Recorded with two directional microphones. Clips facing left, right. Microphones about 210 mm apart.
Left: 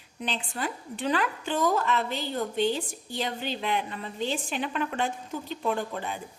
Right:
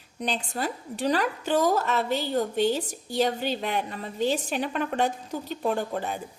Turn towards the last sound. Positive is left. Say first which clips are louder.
# right 2 dB
turn(degrees=-40)  # may be behind; listen again after turning